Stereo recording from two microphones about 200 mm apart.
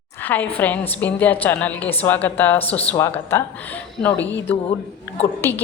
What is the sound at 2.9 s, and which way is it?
Speech, 15° left (ahead or behind).